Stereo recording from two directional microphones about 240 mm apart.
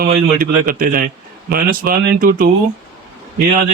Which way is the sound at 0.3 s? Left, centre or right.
Right.